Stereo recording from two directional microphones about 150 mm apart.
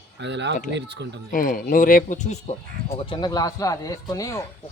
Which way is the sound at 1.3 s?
65° left (ahead or behind).